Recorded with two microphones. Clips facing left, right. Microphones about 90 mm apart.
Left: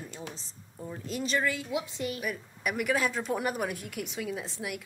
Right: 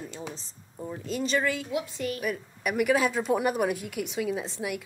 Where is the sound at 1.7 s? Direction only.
20° left (ahead or behind).